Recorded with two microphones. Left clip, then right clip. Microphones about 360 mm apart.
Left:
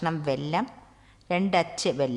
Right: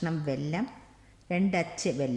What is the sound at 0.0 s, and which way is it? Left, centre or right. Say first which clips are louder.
Speech: left 5 dB; left.